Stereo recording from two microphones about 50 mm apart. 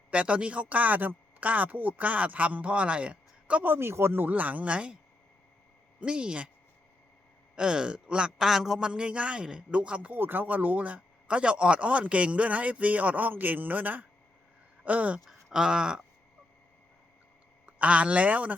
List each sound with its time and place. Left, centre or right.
0.1 s speech: right
3.6 s speech: right
4.3 s speech: right
6.0 s speech: centre
7.5 s a man's voice: centre
8.9 s speech: right
10.1 s speech: right
15.3 s a sound: centre
17.7 s speech: right